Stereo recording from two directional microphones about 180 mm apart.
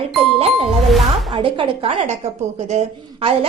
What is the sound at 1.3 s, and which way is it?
A woman's voice, 30° right (ahead or behind).